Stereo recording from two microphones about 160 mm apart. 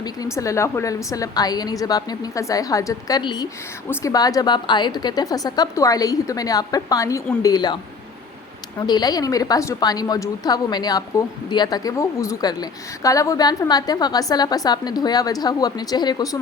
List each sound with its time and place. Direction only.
0.0 s a woman's voice: 20° left (ahead or behind)
8.9 s a woman's voice: 25° left (ahead or behind)